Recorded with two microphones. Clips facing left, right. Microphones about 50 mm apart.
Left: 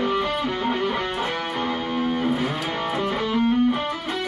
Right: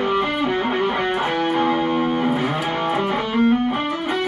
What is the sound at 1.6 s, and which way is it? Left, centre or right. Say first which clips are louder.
Music: right 6 dB; right.